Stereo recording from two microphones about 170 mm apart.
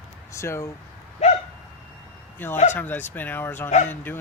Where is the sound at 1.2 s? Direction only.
40° left (ahead or behind).